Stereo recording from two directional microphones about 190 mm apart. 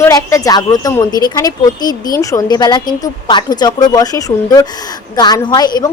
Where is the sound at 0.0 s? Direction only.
15° left (ahead or behind).